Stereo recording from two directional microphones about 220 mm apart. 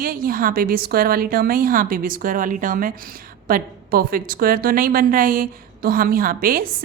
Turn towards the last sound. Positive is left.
turn(degrees=-40)  # may be behind; listen again after turning